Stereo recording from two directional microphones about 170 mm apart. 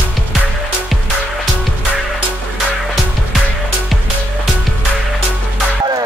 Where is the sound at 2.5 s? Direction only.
Centre (ahead or behind).